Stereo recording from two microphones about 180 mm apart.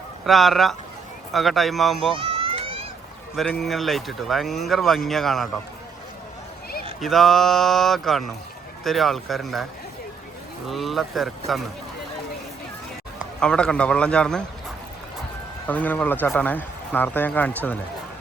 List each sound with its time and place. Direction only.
0.3 s speech: centre (ahead or behind)
2.1 s a sound: 30° right (ahead or behind)
3.3 s speech: centre (ahead or behind)
7.0 s speech: centre (ahead or behind)
10.7 s speech: centre (ahead or behind)
13.4 s speech: 5° left (ahead or behind)
15.6 s speech: 10° left (ahead or behind)